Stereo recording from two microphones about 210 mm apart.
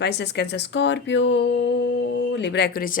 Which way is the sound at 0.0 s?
55° left (ahead or behind).